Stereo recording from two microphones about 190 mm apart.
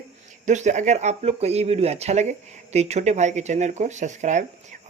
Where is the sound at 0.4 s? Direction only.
40° right (ahead or behind).